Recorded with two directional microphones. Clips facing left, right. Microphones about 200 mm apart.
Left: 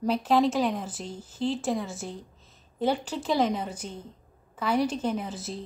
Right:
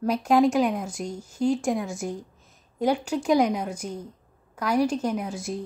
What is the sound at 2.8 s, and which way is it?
A woman's voice, 10° right (ahead or behind).